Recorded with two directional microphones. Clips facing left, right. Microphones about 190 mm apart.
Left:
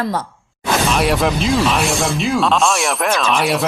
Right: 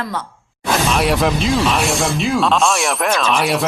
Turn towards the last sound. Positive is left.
turn(degrees=0)  # may be behind; listen again after turning